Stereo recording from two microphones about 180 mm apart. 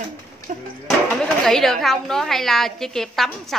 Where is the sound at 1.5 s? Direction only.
Centre (ahead or behind).